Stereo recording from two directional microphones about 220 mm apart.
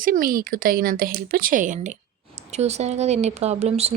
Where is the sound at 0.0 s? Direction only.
40° right (ahead or behind).